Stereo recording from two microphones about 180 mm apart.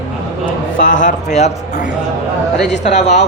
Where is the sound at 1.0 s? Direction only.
40° left (ahead or behind).